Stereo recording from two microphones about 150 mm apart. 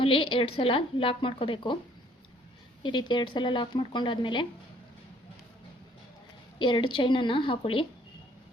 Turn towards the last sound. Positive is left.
turn(degrees=35)  # may be behind; listen again after turning